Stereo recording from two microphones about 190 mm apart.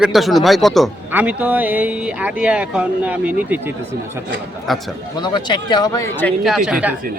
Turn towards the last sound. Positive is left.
turn(degrees=-5)  # may be behind; listen again after turning